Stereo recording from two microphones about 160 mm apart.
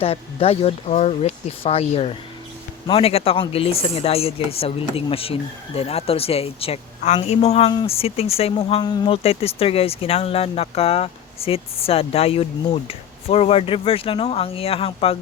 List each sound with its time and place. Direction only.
0.0 s speech: 35° left (ahead or behind)